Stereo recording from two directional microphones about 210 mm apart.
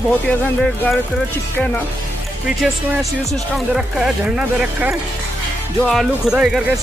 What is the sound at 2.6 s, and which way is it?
Speech, centre (ahead or behind).